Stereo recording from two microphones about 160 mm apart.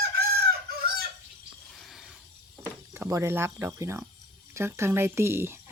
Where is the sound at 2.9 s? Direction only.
15° right (ahead or behind).